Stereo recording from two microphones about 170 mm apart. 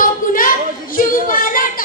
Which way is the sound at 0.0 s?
55° left (ahead or behind).